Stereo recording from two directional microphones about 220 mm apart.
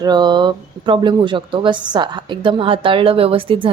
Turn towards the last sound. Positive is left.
turn(degrees=-25)  # may be behind; listen again after turning